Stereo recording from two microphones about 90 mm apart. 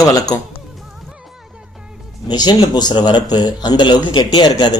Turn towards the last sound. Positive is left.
turn(degrees=60)  # may be behind; listen again after turning